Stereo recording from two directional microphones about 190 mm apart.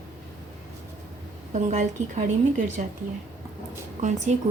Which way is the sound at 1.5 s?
40° right (ahead or behind).